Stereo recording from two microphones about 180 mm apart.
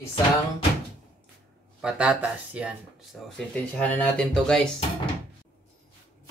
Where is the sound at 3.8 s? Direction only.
10° left (ahead or behind).